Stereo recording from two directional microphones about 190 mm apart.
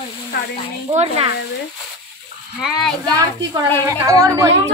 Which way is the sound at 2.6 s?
Centre (ahead or behind).